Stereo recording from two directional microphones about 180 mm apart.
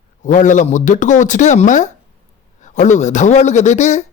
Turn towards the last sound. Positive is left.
turn(degrees=40)  # may be behind; listen again after turning